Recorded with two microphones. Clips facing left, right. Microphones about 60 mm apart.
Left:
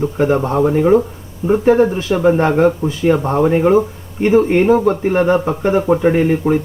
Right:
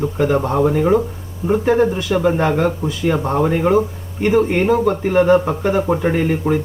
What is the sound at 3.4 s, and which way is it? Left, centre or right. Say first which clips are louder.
Speech: left 2 dB; centre.